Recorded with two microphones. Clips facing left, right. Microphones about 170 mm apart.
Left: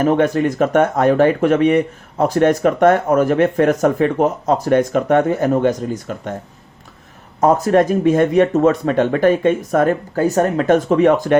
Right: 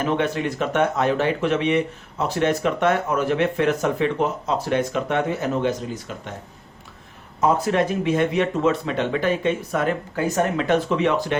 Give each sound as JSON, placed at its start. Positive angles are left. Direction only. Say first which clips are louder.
{"t": 0.0, "sound": "speech", "louder": "left 8 dB", "side_deg": 45}
{"t": 7.4, "sound": "speech", "louder": "left 6 dB", "side_deg": 45}